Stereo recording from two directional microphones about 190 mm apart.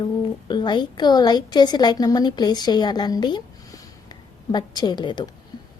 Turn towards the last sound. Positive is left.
turn(degrees=25)  # may be behind; listen again after turning